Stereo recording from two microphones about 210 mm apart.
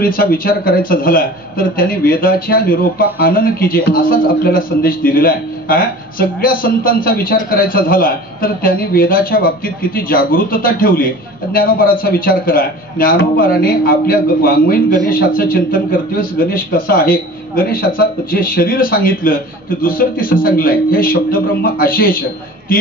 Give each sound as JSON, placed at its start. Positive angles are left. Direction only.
{"t": 0.0, "sound": "a man's voice", "side_deg": 45}